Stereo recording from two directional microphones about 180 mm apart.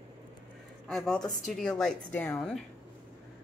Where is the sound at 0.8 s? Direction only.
5° left (ahead or behind).